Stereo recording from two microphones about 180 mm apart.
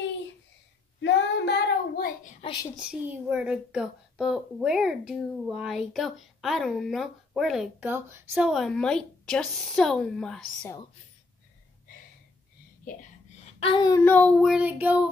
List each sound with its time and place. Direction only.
1.0 s child singing: 65° left (ahead or behind)
2.8 s speech: 5° right (ahead or behind)
8.5 s speech: centre (ahead or behind)
13.6 s speech: 25° left (ahead or behind)
14.0 s speech: 10° left (ahead or behind); by 15.0 s 10° right (ahead or behind)